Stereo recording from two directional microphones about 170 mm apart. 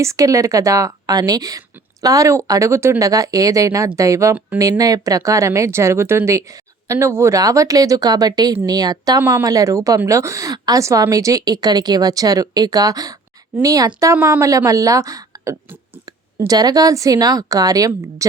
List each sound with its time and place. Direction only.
0.0 s a woman's voice: 20° right (ahead or behind)